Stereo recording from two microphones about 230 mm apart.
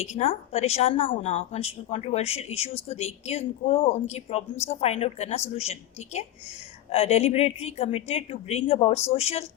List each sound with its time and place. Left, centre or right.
0.0 s a woman's voice: left
6.9 s a woman's voice: left